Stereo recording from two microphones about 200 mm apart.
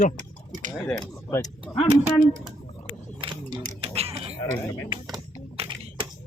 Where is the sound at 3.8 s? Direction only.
30° right (ahead or behind).